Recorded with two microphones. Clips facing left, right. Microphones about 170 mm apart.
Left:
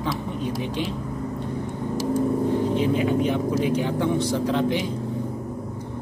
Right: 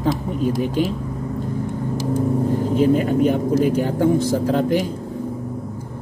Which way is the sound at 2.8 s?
45° right (ahead or behind).